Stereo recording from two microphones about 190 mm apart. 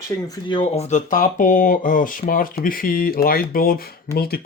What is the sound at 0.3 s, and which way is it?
Speech, 25° left (ahead or behind).